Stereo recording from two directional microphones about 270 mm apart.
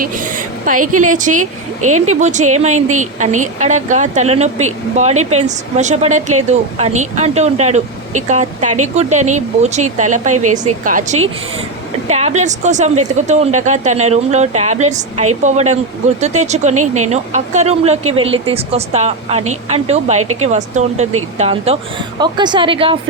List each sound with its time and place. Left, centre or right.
0.0 s a sound: right
0.9 s speech: right
20.2 s speech: right
20.5 s speech: right